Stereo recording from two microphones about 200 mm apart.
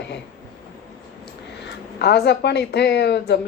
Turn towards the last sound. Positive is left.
turn(degrees=55)  # may be behind; listen again after turning